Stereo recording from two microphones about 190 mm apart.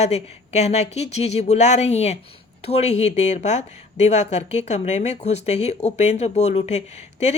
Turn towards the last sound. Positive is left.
turn(degrees=35)  # may be behind; listen again after turning